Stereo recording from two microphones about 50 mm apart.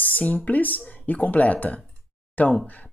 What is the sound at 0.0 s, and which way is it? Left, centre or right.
Speech, left.